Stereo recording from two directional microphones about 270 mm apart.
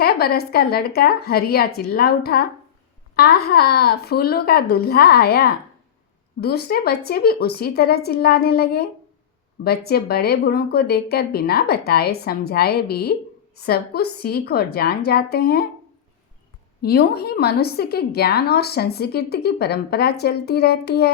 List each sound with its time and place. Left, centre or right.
0.0 s a woman's voice: left
16.8 s a woman's voice: left